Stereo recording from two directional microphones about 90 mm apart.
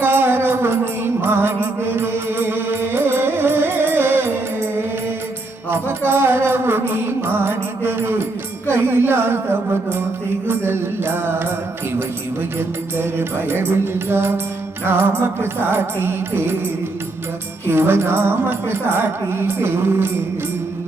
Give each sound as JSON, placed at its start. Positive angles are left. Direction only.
{"t": 0.0, "sound": "music", "side_deg": -25}
{"t": 5.7, "sound": "music", "side_deg": -25}
{"t": 13.0, "sound": "music", "side_deg": -25}
{"t": 17.7, "sound": "music", "side_deg": -25}